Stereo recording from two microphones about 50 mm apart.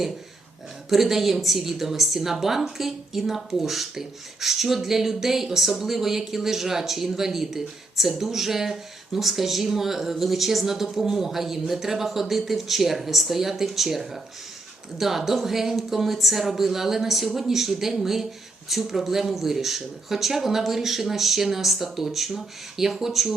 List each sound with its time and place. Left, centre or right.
0.9 s a woman's voice: centre